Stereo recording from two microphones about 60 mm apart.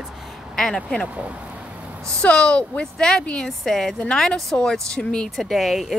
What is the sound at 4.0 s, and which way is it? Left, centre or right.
Speech, centre.